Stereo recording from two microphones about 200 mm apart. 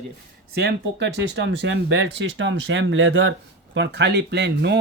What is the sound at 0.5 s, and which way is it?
Speech, 60° right (ahead or behind).